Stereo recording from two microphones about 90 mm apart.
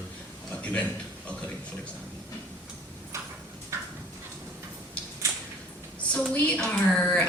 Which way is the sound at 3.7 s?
35° right (ahead or behind).